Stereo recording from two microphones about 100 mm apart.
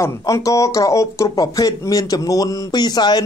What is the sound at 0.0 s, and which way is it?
Speech, 35° left (ahead or behind).